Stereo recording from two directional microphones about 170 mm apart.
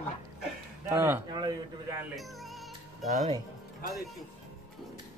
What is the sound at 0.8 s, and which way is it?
Speech, 15° right (ahead or behind).